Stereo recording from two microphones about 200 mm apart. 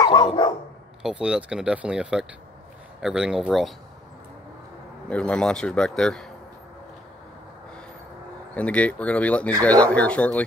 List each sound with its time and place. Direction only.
0.0 s dog: 20° left (ahead or behind)
1.0 s speech: 5° right (ahead or behind)
5.1 s speech: 5° left (ahead or behind)
8.5 s speech: 5° left (ahead or behind)